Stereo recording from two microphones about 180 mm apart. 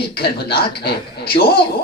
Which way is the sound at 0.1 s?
60° left (ahead or behind).